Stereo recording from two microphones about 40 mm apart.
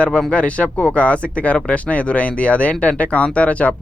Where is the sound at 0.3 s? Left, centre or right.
Left.